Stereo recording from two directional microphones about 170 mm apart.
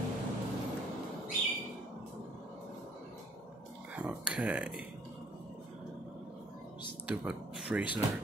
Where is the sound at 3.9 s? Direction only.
5° right (ahead or behind).